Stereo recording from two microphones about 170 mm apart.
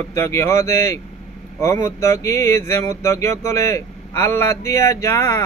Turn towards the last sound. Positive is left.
turn(degrees=15)  # may be behind; listen again after turning